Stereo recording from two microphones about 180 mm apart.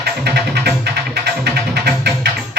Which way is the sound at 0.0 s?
60° right (ahead or behind).